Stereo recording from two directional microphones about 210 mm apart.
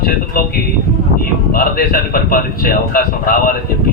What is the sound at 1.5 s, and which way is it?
Speech, 45° left (ahead or behind).